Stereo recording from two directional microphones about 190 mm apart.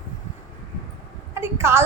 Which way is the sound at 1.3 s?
15° right (ahead or behind).